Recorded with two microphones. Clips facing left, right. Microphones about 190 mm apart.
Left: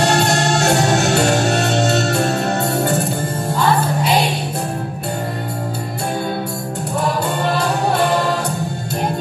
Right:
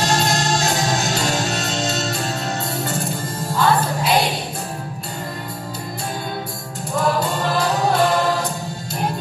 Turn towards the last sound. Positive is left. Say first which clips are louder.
# left 2 dB
turn(degrees=60)  # may be behind; listen again after turning